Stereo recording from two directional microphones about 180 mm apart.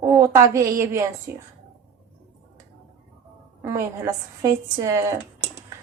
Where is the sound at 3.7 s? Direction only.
15° right (ahead or behind).